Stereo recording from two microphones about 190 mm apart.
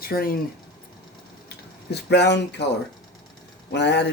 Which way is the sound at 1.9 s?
65° left (ahead or behind).